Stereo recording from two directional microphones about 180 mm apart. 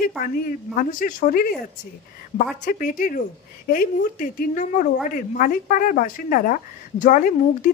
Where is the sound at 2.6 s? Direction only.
50° left (ahead or behind).